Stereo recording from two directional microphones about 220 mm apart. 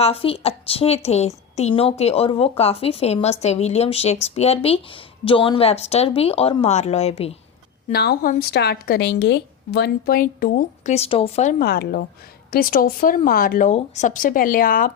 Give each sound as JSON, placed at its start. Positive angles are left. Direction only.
{"t": 0.0, "sound": "speech", "side_deg": 25}
{"t": 7.9, "sound": "a woman's voice", "side_deg": 45}
{"t": 11.6, "sound": "a woman's voice", "side_deg": 45}